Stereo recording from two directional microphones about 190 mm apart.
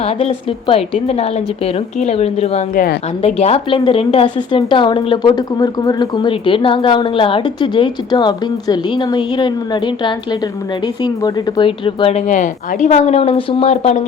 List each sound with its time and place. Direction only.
0.0 s a woman's voice: 30° left (ahead or behind)